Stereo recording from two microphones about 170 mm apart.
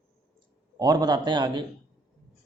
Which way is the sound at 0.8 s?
25° right (ahead or behind).